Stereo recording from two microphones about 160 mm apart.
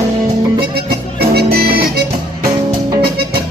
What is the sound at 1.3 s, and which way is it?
Music, 80° right.